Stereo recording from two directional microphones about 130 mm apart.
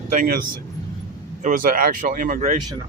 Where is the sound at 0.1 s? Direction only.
90° right.